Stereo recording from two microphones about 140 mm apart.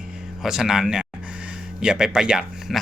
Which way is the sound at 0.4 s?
5° right (ahead or behind).